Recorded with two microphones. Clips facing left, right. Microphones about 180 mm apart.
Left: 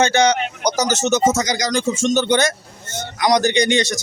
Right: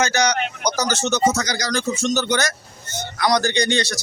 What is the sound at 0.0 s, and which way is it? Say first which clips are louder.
Speech: left 4 dB; 25° left (ahead or behind).